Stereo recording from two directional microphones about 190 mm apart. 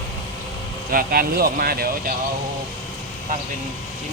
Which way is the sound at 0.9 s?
50° right (ahead or behind).